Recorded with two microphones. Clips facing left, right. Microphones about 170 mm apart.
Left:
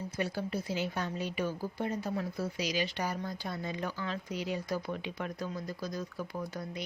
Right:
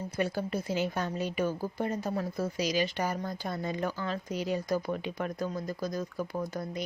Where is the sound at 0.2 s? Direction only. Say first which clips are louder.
Right 3 dB; 50° right (ahead or behind).